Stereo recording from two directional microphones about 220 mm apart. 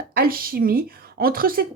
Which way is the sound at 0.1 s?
40° right (ahead or behind).